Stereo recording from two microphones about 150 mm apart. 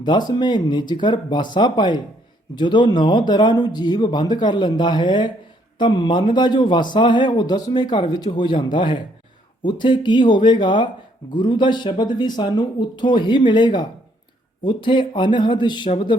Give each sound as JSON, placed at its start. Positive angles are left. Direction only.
{"t": 0.3, "sound": "a man's voice", "side_deg": 30}